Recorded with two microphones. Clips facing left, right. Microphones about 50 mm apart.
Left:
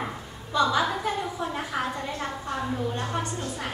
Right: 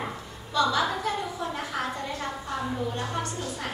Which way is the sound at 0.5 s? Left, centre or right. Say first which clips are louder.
Left 1 dB; left.